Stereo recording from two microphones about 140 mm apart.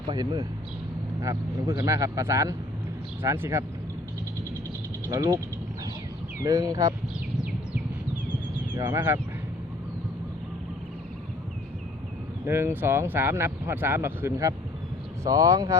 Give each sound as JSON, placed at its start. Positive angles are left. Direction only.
{"t": 0.1, "sound": "speech", "side_deg": -30}
{"t": 1.8, "sound": "speech", "side_deg": -25}
{"t": 5.0, "sound": "speech", "side_deg": -20}
{"t": 6.4, "sound": "speech", "side_deg": -25}
{"t": 8.7, "sound": "speech", "side_deg": -25}
{"t": 12.5, "sound": "speech", "side_deg": -15}